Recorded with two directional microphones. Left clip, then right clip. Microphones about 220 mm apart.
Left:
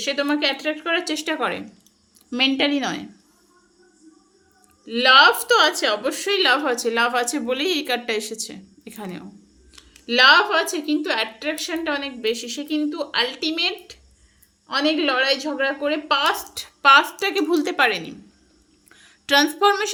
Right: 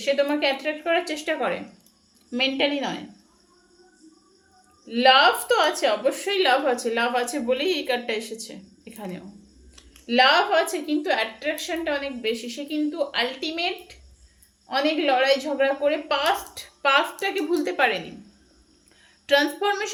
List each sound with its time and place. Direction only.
0.0 s a woman's voice: 45° left (ahead or behind)
4.9 s a woman's voice: 50° left (ahead or behind)